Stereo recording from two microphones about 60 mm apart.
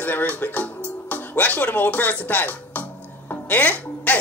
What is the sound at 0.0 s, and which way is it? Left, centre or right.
Speech, left.